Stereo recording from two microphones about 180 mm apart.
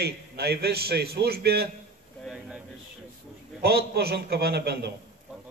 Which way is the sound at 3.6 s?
60° right (ahead or behind).